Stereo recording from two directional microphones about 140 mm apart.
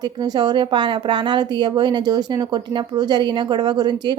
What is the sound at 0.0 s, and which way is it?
Speech, 30° right (ahead or behind).